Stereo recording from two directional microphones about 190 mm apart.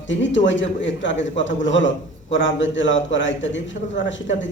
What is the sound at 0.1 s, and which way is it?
A man's voice, 75° left (ahead or behind).